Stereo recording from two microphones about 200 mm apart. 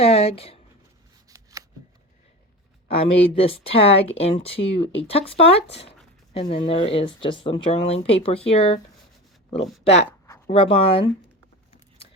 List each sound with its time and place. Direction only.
0.0 s speech: 30° left (ahead or behind)
1.3 s shuffling cards: 15° right (ahead or behind)
3.0 s speech: 30° left (ahead or behind)
9.8 s speech: 30° left (ahead or behind)
10.1 s a sound: 15° left (ahead or behind)
10.5 s speech: 30° left (ahead or behind)